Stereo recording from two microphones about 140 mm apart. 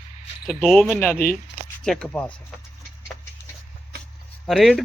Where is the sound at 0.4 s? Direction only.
5° left (ahead or behind).